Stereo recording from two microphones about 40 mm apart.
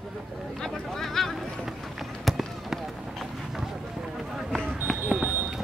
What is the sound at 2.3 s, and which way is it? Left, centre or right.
Fireworks, centre.